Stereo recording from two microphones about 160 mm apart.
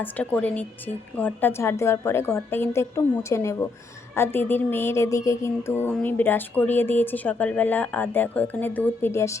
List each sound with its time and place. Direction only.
0.0 s music: 10° left (ahead or behind)